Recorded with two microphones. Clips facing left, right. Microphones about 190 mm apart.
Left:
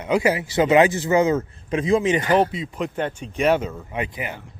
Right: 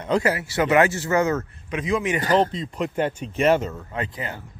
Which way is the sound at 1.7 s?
30° left (ahead or behind).